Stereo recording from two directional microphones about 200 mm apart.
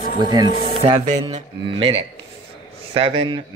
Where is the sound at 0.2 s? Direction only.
20° right (ahead or behind).